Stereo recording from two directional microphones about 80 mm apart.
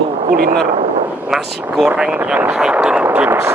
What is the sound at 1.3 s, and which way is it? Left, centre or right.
Speech, centre.